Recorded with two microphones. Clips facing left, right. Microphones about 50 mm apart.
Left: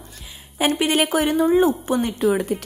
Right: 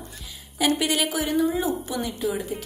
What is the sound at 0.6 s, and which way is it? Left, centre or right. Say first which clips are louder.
A woman's voice: left 4 dB; left.